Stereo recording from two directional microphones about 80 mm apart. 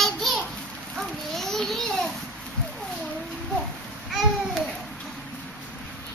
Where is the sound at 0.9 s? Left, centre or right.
Centre.